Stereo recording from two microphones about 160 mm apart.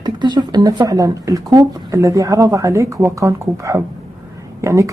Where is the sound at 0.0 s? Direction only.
25° right (ahead or behind).